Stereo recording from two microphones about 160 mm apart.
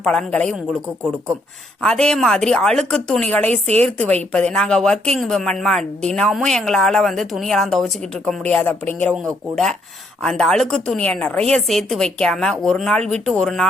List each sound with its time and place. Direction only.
0.0 s a woman's voice: 5° left (ahead or behind)
1.8 s a woman's voice: 5° left (ahead or behind)
3.4 s a woman's voice: 40° right (ahead or behind)
3.8 s a woman's voice: 5° left (ahead or behind)
10.2 s a woman's voice: 5° left (ahead or behind)